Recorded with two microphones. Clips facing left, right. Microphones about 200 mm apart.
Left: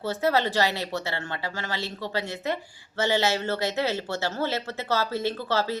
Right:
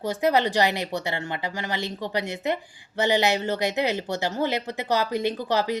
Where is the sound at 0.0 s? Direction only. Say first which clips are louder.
Right 2 dB; 15° right (ahead or behind).